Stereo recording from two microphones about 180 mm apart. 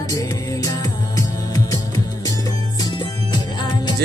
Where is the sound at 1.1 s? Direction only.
20° left (ahead or behind).